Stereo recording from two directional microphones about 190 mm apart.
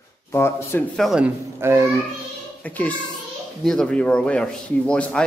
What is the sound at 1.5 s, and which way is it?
Speech, 15° right (ahead or behind).